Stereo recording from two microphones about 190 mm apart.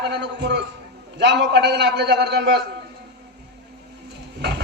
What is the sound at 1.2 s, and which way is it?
A man's voice, 65° right (ahead or behind).